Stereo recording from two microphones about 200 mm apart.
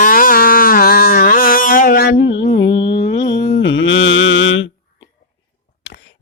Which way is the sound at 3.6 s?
70° left (ahead or behind).